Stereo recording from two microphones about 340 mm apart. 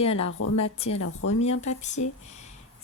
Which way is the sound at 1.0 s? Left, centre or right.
Left.